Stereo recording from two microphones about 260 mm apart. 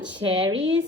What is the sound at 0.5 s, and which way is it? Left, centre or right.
Speech, right.